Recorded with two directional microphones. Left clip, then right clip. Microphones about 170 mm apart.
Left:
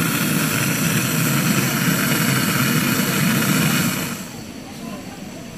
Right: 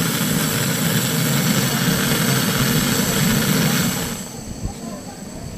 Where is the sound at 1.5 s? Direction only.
45° right (ahead or behind).